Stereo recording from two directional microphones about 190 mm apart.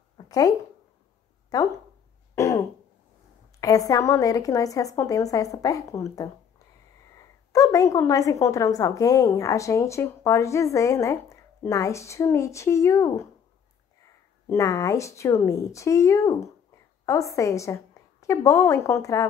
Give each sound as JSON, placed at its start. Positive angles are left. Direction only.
{"t": 0.3, "sound": "speech", "side_deg": 20}
{"t": 2.3, "sound": "throat clearing", "side_deg": 15}
{"t": 3.6, "sound": "speech", "side_deg": 20}
{"t": 7.5, "sound": "a woman's voice", "side_deg": 15}
{"t": 14.5, "sound": "speech", "side_deg": 15}